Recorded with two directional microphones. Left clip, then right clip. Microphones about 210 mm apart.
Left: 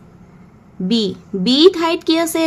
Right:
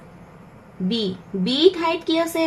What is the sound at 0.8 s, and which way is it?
A woman's voice, 45° left (ahead or behind).